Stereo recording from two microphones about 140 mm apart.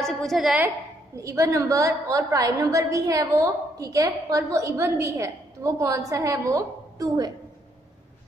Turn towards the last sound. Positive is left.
turn(degrees=-25)  # may be behind; listen again after turning